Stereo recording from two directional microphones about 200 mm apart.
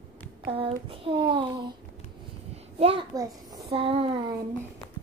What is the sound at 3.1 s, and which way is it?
Speech, 15° right (ahead or behind).